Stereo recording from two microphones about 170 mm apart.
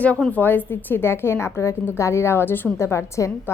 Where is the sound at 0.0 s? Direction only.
10° left (ahead or behind).